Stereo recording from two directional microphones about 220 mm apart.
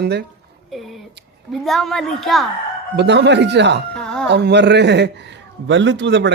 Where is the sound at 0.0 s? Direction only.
50° right (ahead or behind).